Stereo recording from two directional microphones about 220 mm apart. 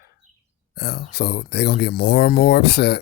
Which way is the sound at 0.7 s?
45° left (ahead or behind).